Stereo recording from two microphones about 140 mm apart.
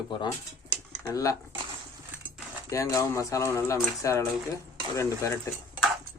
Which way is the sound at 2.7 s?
20° left (ahead or behind).